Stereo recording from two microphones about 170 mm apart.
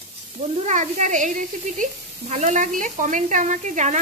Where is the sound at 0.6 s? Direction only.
45° right (ahead or behind).